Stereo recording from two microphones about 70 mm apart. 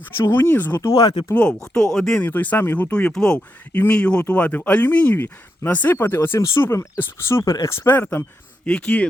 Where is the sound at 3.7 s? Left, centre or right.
Left.